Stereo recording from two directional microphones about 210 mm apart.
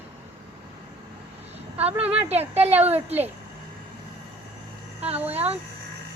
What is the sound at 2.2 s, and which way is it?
Speech, 30° right (ahead or behind).